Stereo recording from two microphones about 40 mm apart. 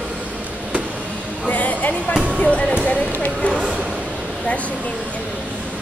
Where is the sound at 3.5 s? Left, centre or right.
Right.